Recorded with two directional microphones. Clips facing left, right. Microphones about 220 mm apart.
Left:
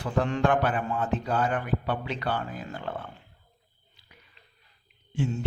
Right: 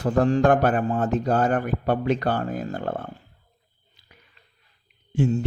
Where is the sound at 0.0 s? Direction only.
40° right (ahead or behind).